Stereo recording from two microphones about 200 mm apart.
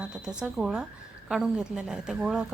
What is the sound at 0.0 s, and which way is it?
Speech, 5° right (ahead or behind).